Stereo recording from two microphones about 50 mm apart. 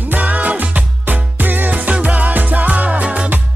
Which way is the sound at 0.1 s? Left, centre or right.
Right.